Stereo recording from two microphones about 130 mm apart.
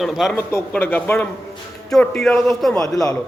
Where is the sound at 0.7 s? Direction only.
15° left (ahead or behind).